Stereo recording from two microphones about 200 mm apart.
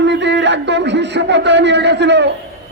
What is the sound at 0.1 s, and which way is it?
A man's voice, 60° right (ahead or behind).